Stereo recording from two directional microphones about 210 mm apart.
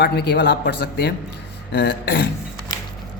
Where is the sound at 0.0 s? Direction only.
50° left (ahead or behind).